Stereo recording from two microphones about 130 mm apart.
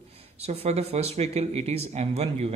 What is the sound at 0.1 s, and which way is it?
Speech, 50° right (ahead or behind).